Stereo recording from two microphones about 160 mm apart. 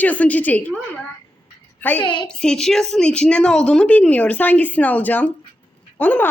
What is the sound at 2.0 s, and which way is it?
Speech, 30° left (ahead or behind).